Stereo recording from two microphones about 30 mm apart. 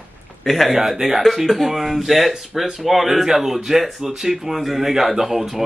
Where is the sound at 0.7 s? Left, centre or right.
Centre.